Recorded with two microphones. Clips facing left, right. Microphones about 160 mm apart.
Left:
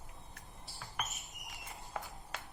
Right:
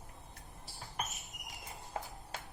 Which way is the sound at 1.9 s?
30° right (ahead or behind).